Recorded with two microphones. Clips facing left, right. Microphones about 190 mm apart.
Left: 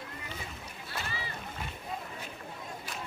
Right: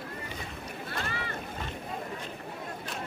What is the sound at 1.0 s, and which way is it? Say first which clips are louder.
Boat: right 4 dB; 55° right (ahead or behind).